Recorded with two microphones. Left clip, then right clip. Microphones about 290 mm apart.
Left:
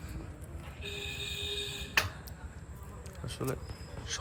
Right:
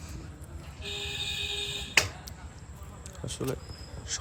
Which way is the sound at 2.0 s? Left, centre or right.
Centre.